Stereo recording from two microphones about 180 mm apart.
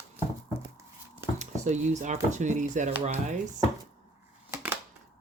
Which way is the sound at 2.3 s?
45° right (ahead or behind).